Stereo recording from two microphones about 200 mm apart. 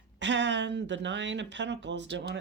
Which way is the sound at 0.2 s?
65° right (ahead or behind).